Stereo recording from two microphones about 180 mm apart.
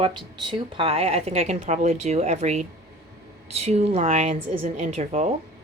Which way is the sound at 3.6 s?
35° right (ahead or behind).